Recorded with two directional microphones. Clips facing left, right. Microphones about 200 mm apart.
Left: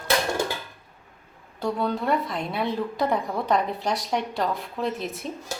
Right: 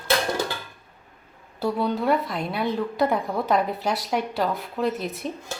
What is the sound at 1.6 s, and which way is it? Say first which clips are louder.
A woman's voice: right 2 dB; 5° right (ahead or behind).